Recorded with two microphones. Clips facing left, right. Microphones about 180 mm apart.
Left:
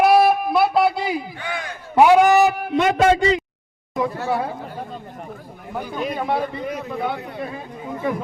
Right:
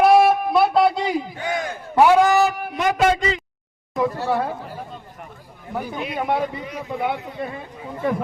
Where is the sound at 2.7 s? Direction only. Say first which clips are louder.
Left 3 dB; 30° left (ahead or behind).